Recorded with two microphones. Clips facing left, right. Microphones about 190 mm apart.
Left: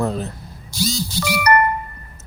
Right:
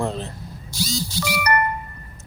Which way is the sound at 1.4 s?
60° left (ahead or behind).